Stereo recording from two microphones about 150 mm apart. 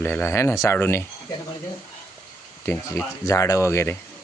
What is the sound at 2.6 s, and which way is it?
Speech, 15° left (ahead or behind).